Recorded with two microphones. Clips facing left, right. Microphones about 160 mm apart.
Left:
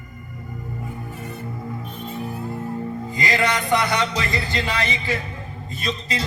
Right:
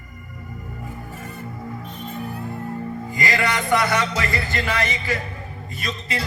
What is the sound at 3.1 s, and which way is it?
A man's voice, 20° left (ahead or behind).